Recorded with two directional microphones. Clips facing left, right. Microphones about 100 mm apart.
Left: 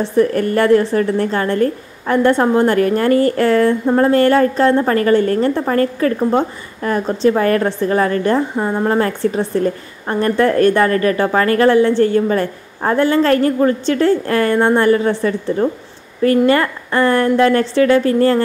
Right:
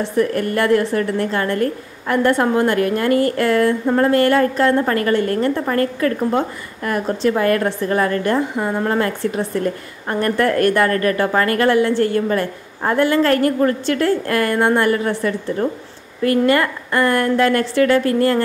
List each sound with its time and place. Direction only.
0.0 s a woman's voice: 35° left (ahead or behind)